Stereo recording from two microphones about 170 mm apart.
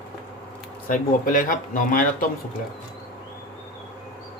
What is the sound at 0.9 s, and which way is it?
Speech, 55° left (ahead or behind).